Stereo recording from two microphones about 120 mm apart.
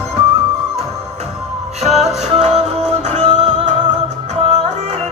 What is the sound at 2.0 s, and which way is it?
Music, 70° right (ahead or behind).